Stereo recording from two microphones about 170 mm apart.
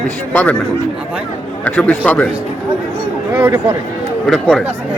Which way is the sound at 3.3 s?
15° right (ahead or behind).